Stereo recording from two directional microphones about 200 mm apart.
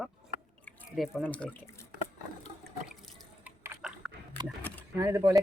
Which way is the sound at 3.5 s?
10° right (ahead or behind).